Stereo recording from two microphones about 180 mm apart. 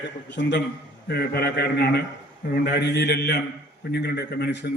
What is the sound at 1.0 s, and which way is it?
A man's voice, 65° left (ahead or behind).